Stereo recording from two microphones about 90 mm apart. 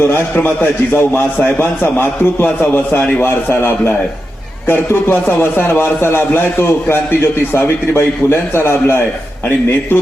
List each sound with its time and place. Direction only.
0.0 s a man's voice: 20° left (ahead or behind)